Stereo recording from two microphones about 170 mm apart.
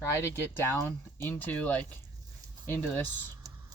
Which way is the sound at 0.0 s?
15° left (ahead or behind).